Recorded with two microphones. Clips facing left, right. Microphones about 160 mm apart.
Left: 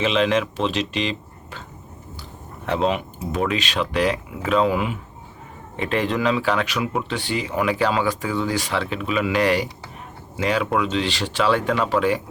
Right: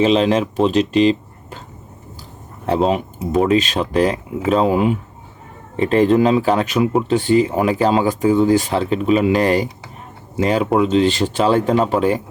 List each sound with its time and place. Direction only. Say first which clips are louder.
0.0 s speech: right 5 dB; 40° right (ahead or behind)
2.6 s speech: right 5 dB; 40° right (ahead or behind)